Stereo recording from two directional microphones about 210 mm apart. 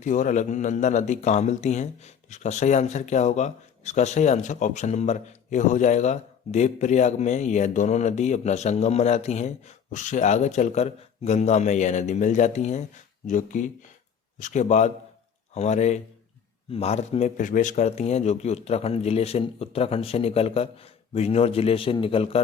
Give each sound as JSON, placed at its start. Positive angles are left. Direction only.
{"t": 0.0, "sound": "a man's voice", "side_deg": 40}